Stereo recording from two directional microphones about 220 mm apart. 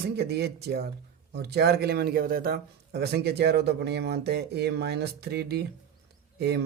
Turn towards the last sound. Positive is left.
turn(degrees=-50)  # may be behind; listen again after turning